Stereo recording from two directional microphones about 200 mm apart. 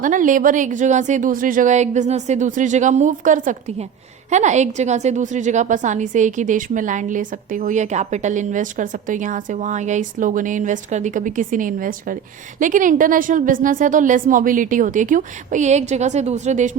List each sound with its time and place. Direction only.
0.0 s a woman's voice: 40° right (ahead or behind)